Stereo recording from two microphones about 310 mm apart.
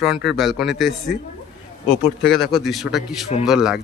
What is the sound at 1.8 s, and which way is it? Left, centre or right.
Speech, left.